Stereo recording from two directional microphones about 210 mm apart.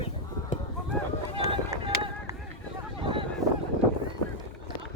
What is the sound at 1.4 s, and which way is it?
Run, 15° right (ahead or behind).